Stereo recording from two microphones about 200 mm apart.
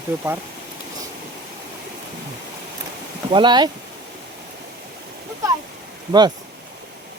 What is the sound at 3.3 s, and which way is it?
Speech, 25° right (ahead or behind).